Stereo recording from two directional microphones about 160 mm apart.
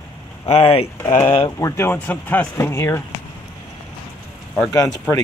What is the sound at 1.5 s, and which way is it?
Speech, 20° left (ahead or behind).